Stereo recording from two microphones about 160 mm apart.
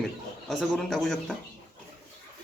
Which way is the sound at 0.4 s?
Centre (ahead or behind).